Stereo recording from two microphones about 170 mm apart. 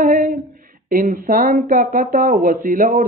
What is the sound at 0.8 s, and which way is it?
Speech, 55° right (ahead or behind).